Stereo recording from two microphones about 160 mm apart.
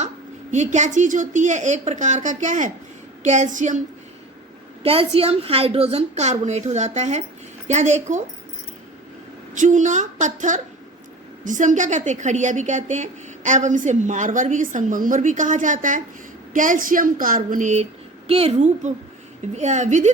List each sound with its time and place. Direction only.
0.5 s a woman's voice: 50° right (ahead or behind)
4.8 s a woman's voice: 35° right (ahead or behind)
9.6 s a woman's voice: 50° right (ahead or behind)
18.3 s a woman's voice: 40° right (ahead or behind)